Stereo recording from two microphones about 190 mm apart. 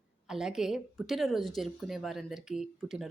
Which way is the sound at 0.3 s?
5° right (ahead or behind).